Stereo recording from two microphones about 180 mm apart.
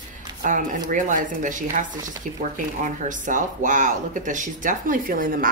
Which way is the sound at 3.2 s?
45° right (ahead or behind).